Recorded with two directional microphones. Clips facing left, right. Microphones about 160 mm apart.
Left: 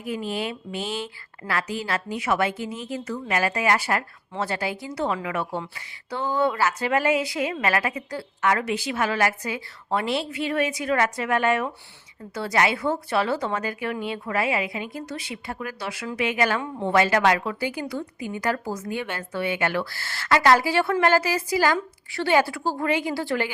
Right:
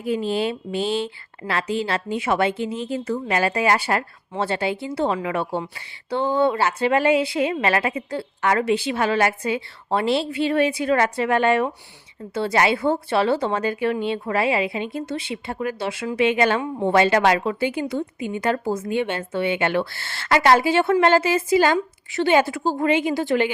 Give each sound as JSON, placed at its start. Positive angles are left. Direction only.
{"t": 0.0, "sound": "a woman's voice", "side_deg": -30}